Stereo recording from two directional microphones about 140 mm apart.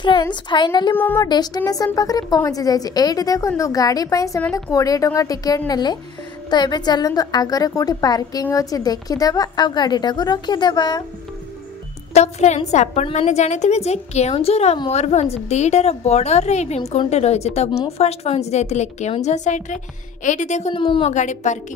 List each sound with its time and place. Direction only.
0.2 s a woman's voice: 35° left (ahead or behind)
0.9 s speech: 15° left (ahead or behind)
1.2 s a woman's voice: 30° left (ahead or behind)
12.1 s a woman's voice: 50° left (ahead or behind)
20.7 s a woman's voice: 35° left (ahead or behind)
21.1 s a woman's voice: 60° left (ahead or behind)